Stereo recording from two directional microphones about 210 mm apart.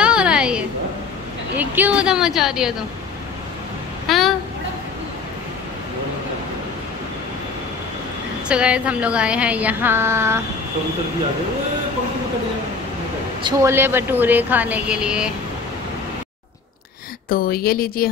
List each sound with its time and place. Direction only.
0.0 s a sound: 5° right (ahead or behind)
1.6 s a woman's voice: 10° right (ahead or behind)
4.1 s a sound: centre (ahead or behind)
8.5 s a woman's voice: 5° right (ahead or behind)
13.4 s a woman's voice: 15° right (ahead or behind)
17.3 s a woman's voice: 45° left (ahead or behind)